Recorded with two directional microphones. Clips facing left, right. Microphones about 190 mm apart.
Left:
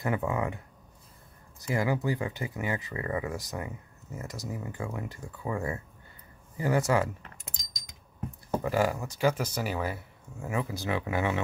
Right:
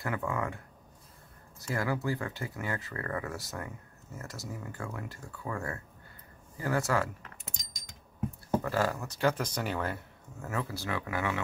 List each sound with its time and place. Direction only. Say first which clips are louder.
0.0 s speech: left 4 dB; 20° left (ahead or behind)
1.7 s speech: left 3 dB; 15° left (ahead or behind)
8.6 s speech: left 3 dB; 15° left (ahead or behind)